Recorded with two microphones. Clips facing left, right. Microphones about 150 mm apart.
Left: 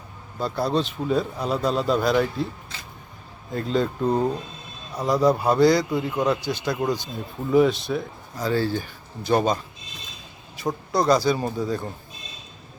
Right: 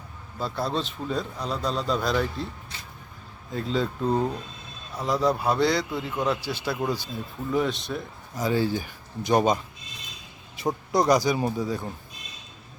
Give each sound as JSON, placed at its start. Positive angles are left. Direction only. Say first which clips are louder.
{"t": 0.3, "sound": "a man's voice", "louder": "left 4 dB", "side_deg": 0}
{"t": 3.5, "sound": "a man's voice", "louder": "left 3 dB", "side_deg": 0}
{"t": 8.4, "sound": "a man's voice", "louder": "left 1 dB", "side_deg": -15}
{"t": 10.6, "sound": "a man's voice", "louder": "even", "side_deg": -20}